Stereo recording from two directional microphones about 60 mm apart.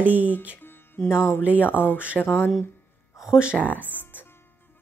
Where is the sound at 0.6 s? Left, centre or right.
Left.